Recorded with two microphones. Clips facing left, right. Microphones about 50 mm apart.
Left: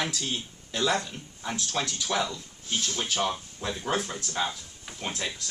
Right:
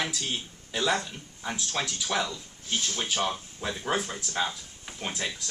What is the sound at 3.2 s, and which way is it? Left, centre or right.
Speech, centre.